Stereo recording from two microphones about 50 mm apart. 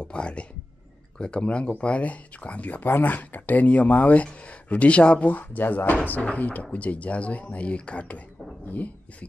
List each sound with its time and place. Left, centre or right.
0.0 s speech: left
5.3 s speech: left